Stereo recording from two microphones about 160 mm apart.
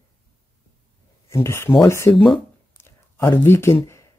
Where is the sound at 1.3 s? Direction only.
15° left (ahead or behind).